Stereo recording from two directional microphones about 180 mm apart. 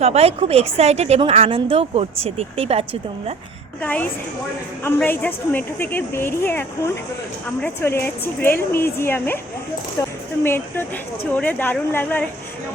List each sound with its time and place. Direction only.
0.0 s a woman's voice: 35° right (ahead or behind)
3.8 s a woman's voice: 10° left (ahead or behind)